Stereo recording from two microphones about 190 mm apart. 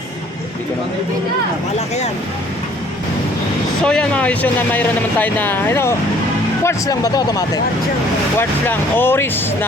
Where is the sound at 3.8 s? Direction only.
5° left (ahead or behind).